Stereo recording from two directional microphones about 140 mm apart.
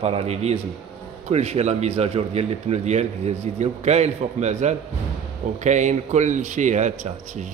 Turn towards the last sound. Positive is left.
turn(degrees=-60)  # may be behind; listen again after turning